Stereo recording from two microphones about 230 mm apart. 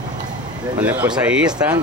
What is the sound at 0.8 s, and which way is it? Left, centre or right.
Speech, centre.